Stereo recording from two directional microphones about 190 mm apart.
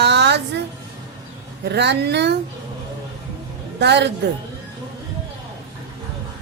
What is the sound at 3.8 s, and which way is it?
Speech, 65° right (ahead or behind).